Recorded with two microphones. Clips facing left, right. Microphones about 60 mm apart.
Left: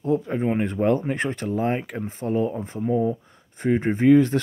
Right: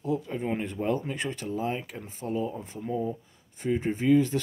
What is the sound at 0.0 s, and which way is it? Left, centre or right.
Speech, left.